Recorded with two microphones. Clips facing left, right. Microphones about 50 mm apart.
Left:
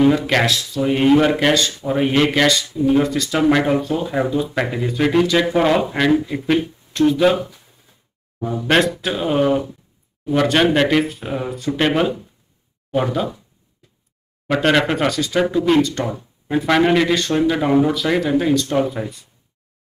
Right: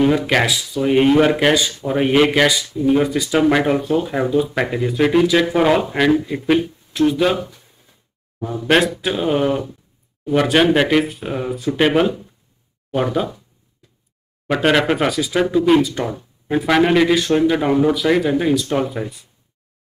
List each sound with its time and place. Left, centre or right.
0.0 s speech: centre
8.5 s speech: centre
14.5 s speech: centre